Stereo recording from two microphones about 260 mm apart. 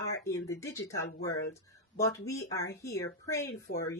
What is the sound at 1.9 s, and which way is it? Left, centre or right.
Speech, centre.